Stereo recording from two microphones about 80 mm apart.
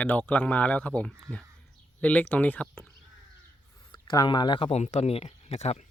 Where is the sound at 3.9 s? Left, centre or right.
Left.